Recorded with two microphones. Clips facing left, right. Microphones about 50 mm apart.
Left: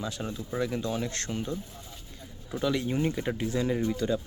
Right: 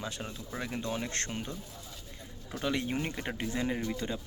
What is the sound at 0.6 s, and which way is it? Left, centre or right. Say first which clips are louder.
Speech: left 5 dB; right.